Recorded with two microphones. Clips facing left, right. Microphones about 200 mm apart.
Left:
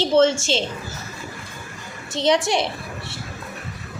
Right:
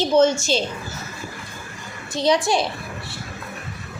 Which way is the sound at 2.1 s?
25° left (ahead or behind).